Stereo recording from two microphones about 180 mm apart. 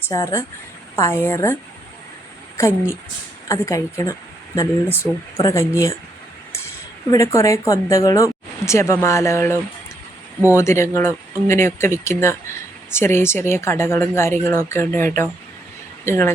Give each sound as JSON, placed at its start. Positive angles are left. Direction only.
{"t": 0.1, "sound": "speech", "side_deg": 15}
{"t": 2.6, "sound": "speech", "side_deg": 15}
{"t": 7.1, "sound": "speech", "side_deg": 15}